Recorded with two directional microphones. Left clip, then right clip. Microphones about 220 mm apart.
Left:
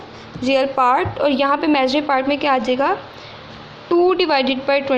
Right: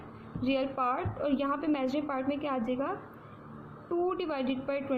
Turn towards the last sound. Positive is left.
turn(degrees=20)  # may be behind; listen again after turning